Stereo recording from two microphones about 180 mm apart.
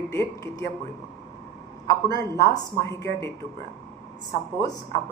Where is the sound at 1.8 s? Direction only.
20° left (ahead or behind).